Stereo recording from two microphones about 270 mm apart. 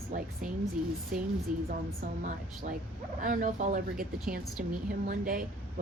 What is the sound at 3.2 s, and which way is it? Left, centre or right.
Speech, right.